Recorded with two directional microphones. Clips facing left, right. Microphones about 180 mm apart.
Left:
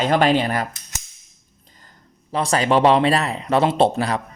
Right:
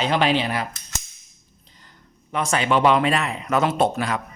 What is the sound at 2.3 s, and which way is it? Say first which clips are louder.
A man's voice: left 3 dB; 35° left (ahead or behind).